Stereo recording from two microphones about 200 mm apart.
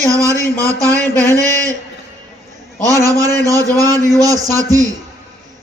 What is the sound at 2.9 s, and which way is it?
A man's voice, 15° right (ahead or behind).